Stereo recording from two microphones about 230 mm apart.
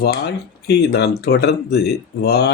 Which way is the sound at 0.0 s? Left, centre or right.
Left.